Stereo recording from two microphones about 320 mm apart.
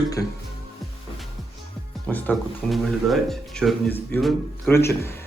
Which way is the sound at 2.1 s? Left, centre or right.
Centre.